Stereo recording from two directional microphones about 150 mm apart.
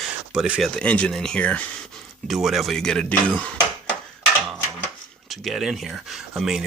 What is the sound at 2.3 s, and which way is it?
Speech, centre (ahead or behind).